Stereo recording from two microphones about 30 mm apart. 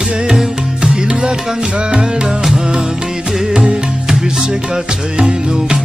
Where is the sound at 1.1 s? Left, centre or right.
Right.